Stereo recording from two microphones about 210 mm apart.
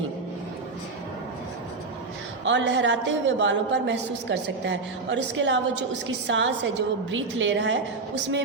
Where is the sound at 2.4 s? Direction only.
60° right (ahead or behind).